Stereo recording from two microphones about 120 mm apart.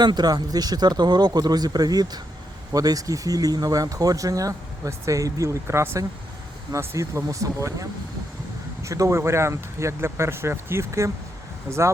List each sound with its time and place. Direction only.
0.0 s speech: 35° right (ahead or behind)